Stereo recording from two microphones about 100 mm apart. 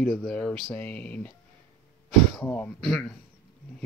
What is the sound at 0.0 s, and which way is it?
Speech, 5° left (ahead or behind).